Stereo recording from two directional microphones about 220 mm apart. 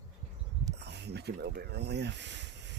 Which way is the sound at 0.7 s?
50° right (ahead or behind).